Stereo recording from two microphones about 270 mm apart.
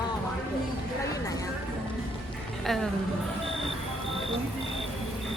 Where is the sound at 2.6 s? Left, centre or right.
Centre.